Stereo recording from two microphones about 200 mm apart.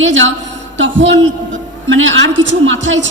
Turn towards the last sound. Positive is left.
turn(degrees=-70)  # may be behind; listen again after turning